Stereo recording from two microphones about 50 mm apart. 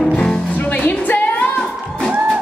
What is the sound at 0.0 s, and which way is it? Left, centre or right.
Music, centre.